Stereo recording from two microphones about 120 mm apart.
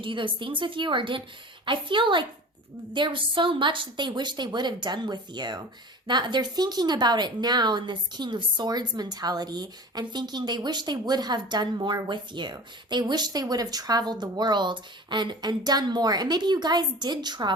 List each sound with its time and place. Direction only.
0.0 s a woman's voice: 45° right (ahead or behind)